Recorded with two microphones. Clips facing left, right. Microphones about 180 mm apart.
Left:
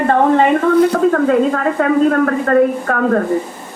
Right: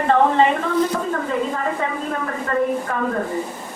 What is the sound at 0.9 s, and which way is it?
A man's voice, 70° left (ahead or behind).